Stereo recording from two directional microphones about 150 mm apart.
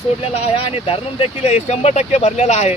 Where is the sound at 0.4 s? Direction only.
40° left (ahead or behind).